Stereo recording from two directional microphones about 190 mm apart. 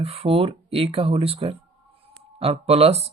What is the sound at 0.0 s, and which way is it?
Speech, 30° right (ahead or behind).